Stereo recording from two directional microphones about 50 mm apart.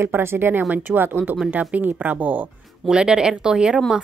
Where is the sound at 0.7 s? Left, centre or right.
Right.